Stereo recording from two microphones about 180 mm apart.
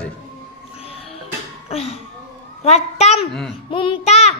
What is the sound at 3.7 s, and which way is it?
Child singing, 30° left (ahead or behind).